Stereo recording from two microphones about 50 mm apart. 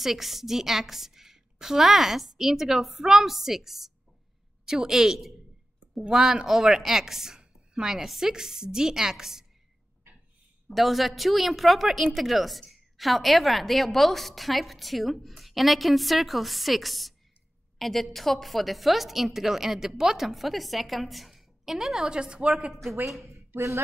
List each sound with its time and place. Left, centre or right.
0.0 s a woman's voice: centre
10.7 s a woman's voice: centre; by 22.7 s right
23.0 s a woman's voice: centre
23.5 s speech: right